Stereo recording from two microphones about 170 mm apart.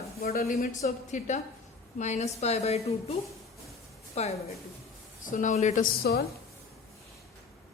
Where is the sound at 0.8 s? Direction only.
50° left (ahead or behind).